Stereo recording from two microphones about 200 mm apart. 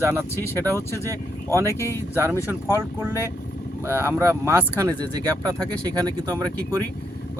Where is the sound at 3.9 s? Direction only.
10° right (ahead or behind).